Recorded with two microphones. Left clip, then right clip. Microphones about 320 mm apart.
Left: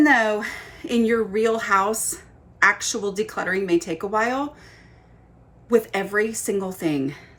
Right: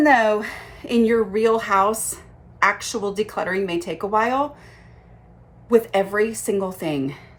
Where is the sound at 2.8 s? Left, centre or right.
Centre.